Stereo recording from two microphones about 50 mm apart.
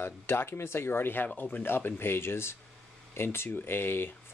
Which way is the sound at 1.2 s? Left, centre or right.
Left.